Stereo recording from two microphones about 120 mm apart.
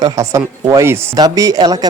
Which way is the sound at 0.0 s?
25° right (ahead or behind).